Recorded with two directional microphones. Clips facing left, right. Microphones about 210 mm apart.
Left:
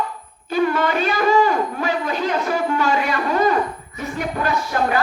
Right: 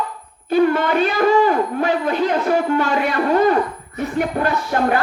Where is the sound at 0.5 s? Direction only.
55° right (ahead or behind).